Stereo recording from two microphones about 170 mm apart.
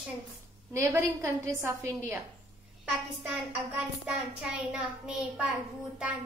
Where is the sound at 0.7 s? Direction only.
15° right (ahead or behind).